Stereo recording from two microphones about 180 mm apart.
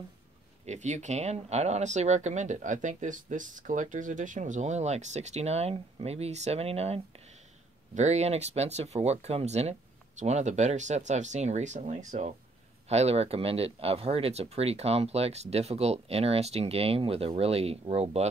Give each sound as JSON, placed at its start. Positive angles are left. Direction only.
{"t": 0.7, "sound": "speech", "side_deg": -40}